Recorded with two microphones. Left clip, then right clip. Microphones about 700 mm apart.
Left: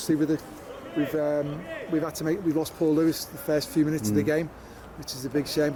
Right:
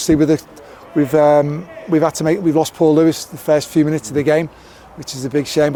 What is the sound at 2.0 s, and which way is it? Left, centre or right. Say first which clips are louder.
Speech: right 12 dB; right.